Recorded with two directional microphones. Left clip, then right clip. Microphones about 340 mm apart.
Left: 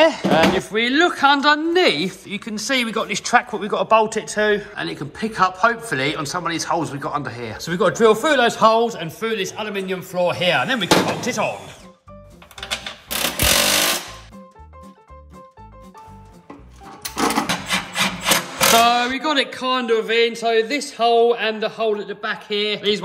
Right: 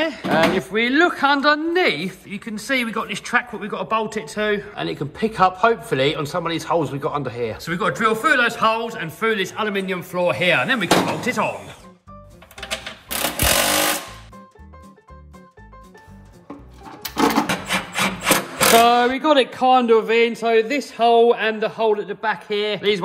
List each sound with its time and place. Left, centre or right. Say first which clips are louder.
0.0 s speech: left 4 dB; centre
12.5 s a sound: left 1 dB; centre
18.8 s speech: right 1 dB; centre